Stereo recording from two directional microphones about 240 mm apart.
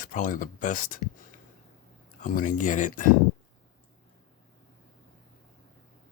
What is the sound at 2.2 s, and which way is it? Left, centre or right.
Speech, left.